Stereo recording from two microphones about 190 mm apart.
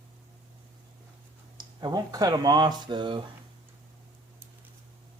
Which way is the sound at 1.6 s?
20° right (ahead or behind).